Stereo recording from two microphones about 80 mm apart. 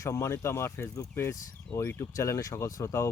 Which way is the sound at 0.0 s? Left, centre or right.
Left.